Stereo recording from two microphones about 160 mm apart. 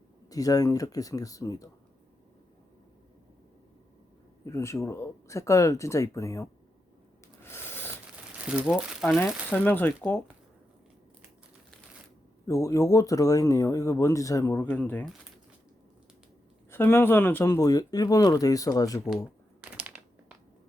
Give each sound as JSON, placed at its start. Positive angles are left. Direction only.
{"t": 0.3, "sound": "speech", "side_deg": 20}
{"t": 4.4, "sound": "speech", "side_deg": 20}
{"t": 7.4, "sound": "a sound", "side_deg": 15}
{"t": 8.4, "sound": "speech", "side_deg": -5}
{"t": 9.5, "sound": "speech", "side_deg": 10}
{"t": 12.5, "sound": "speech", "side_deg": 20}
{"t": 16.7, "sound": "speech", "side_deg": 15}
{"t": 19.7, "sound": "a sound", "side_deg": -10}